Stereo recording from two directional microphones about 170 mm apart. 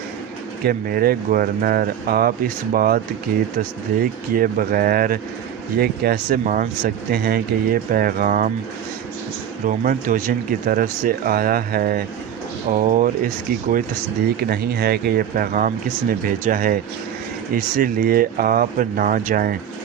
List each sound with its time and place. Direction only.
0.6 s speech: 60° right (ahead or behind)
9.6 s speech: 50° right (ahead or behind)
14.5 s speech: 65° right (ahead or behind)